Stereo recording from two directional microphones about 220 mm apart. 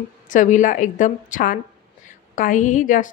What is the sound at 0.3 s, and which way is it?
A woman's voice, 35° left (ahead or behind).